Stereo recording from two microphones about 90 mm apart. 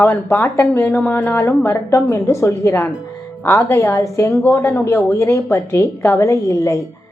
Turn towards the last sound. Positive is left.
turn(degrees=35)  # may be behind; listen again after turning